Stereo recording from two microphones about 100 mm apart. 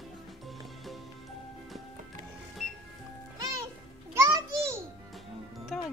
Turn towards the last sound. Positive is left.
turn(degrees=0)  # may be behind; listen again after turning